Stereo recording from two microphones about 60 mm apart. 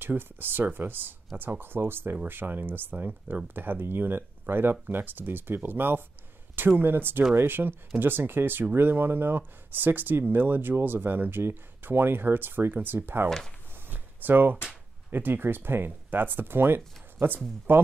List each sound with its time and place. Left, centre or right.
0.0 s speech: right
13.8 s a sound: right
15.0 s speech: right